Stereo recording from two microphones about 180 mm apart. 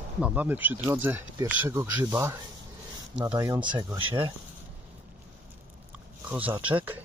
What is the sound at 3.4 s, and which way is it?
Speech, 20° right (ahead or behind).